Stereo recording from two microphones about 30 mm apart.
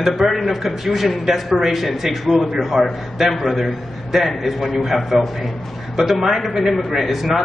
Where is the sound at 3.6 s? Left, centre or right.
Centre.